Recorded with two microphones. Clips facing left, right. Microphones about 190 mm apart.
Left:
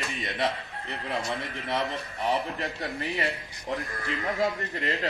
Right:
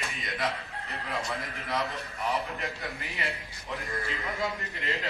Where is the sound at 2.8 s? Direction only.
35° left (ahead or behind).